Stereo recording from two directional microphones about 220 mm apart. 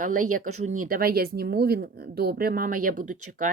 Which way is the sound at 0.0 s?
35° right (ahead or behind).